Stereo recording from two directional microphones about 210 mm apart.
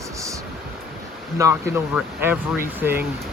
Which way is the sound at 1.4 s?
15° right (ahead or behind).